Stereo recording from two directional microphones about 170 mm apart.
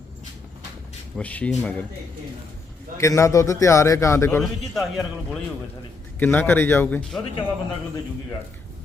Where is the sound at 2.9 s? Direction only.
15° left (ahead or behind).